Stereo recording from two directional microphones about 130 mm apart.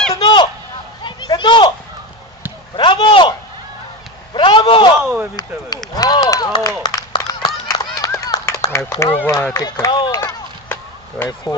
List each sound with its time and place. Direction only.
0.1 s honk: 35° left (ahead or behind)
1.0 s a sound: 35° left (ahead or behind)
2.7 s a sound: 40° left (ahead or behind)
5.9 s run: 30° left (ahead or behind)
9.0 s speech: 20° left (ahead or behind); by 10.2 s 35° left (ahead or behind)
10.2 s chop: 15° left (ahead or behind)